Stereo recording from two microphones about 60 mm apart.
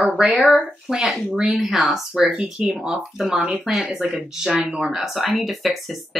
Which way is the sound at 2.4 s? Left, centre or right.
Right.